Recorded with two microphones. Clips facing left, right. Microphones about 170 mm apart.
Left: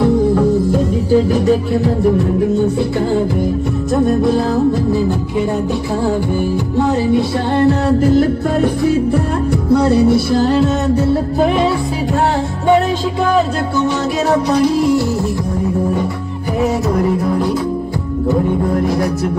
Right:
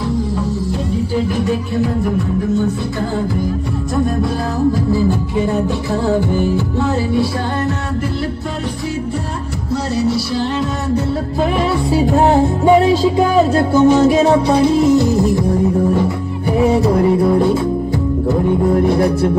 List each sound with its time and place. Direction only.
6.5 s music: 15° left (ahead or behind)
7.6 s music: 40° left (ahead or behind)
9.7 s music: 55° left (ahead or behind)
13.7 s music: 50° right (ahead or behind)
14.3 s music: 30° right (ahead or behind)
14.9 s music: 20° right (ahead or behind)
18.9 s music: 30° right (ahead or behind)